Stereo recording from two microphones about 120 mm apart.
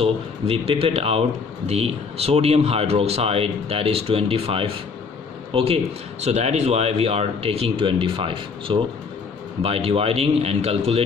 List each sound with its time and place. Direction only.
0.0 s speech: 55° right (ahead or behind)
6.2 s speech: 65° right (ahead or behind)